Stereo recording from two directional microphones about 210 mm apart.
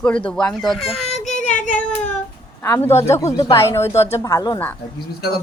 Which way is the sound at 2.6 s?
10° left (ahead or behind).